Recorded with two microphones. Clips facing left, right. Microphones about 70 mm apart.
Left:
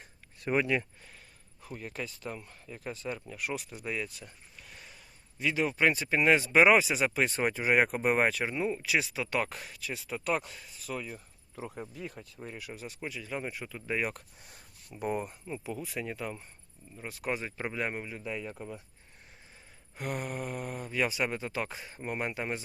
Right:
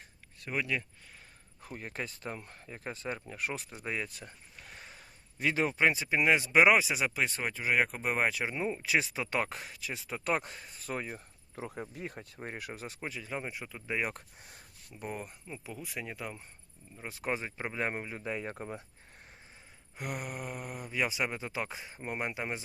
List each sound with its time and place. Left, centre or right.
0.4 s speech: left
1.7 s speech: right
4.2 s a sound: right
5.7 s speech: centre
8.3 s speech: centre
8.5 s speech: centre
8.9 s speech: right
11.5 s speech: right
13.0 s speech: right; by 14.1 s centre
14.9 s speech: centre
17.1 s speech: right
17.7 s speech: right
20.0 s speech: centre